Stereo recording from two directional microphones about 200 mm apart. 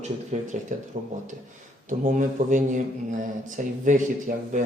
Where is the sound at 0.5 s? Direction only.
40° right (ahead or behind).